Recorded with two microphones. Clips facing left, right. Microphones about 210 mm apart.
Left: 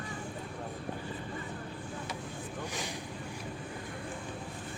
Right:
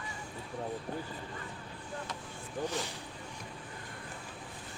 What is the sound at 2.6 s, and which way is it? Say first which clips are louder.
Vehicle: right 6 dB; 15° left (ahead or behind).